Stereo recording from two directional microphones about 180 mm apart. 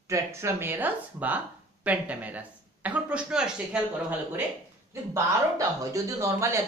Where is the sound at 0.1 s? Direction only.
15° right (ahead or behind).